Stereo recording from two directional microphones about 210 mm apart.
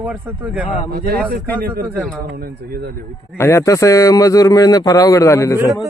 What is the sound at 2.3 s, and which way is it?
Speech, 45° right (ahead or behind).